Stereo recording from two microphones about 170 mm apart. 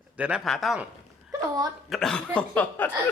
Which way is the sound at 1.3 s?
20° right (ahead or behind).